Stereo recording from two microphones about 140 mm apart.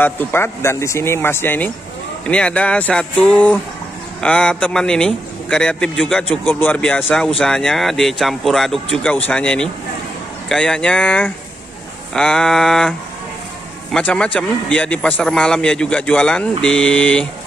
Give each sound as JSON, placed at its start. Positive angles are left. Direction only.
{"t": 0.0, "sound": "a man's voice", "side_deg": 15}
{"t": 13.9, "sound": "a man's voice", "side_deg": 5}